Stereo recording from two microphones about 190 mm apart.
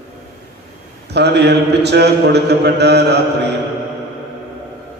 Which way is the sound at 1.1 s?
60° right (ahead or behind).